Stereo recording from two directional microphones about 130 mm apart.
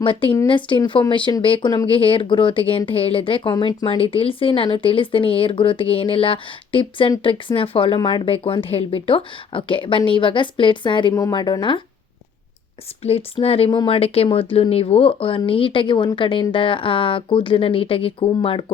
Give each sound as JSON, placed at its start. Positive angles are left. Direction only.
{"t": 0.0, "sound": "speech", "side_deg": 40}
{"t": 13.0, "sound": "speech", "side_deg": 50}